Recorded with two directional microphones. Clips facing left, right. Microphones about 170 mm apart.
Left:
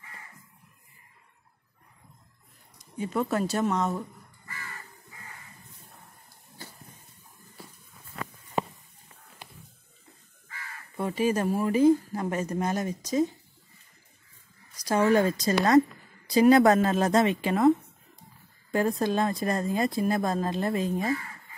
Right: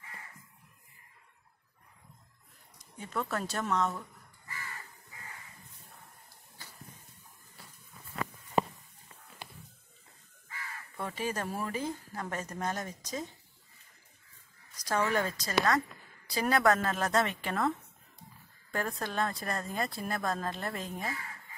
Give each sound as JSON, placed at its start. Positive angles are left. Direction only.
{"t": 3.0, "sound": "speech", "side_deg": 15}
{"t": 11.0, "sound": "speech", "side_deg": 10}
{"t": 14.9, "sound": "speech", "side_deg": 20}